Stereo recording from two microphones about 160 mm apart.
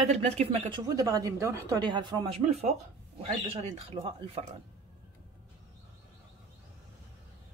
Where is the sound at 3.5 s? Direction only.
35° right (ahead or behind).